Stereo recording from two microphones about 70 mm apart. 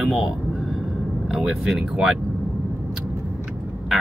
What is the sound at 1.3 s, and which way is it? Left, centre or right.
Speech, centre.